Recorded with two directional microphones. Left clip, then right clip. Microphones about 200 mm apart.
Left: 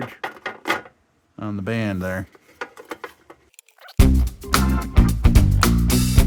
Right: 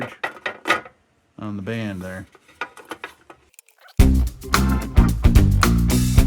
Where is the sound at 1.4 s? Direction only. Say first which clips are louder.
Left 3 dB; 25° left (ahead or behind).